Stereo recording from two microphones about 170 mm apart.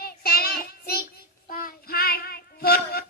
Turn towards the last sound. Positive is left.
turn(degrees=65)  # may be behind; listen again after turning